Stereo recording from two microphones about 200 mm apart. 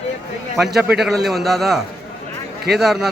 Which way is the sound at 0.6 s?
Centre (ahead or behind).